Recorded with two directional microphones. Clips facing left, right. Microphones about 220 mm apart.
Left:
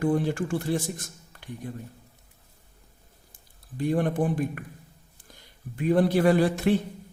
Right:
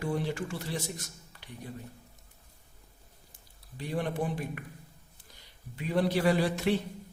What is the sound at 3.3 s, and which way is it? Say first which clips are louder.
A man's voice: left 11 dB; 50° left (ahead or behind).